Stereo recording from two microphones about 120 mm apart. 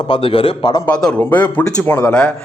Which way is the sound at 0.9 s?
5° left (ahead or behind).